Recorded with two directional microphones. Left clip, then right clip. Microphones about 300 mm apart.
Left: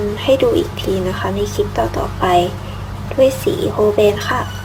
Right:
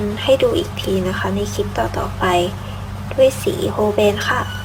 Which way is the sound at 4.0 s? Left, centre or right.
Centre.